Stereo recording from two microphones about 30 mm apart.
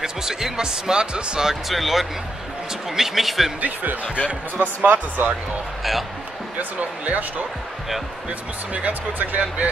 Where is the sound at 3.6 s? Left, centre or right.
Right.